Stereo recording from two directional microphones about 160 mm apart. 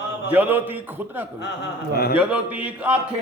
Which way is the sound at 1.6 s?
75° left (ahead or behind).